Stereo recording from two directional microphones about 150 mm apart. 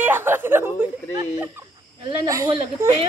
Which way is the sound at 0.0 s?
15° right (ahead or behind).